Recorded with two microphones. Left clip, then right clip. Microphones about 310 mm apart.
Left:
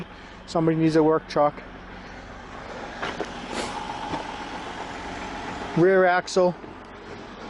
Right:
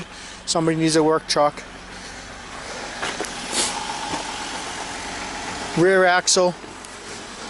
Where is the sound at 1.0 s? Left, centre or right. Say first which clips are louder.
Right 2 dB; centre.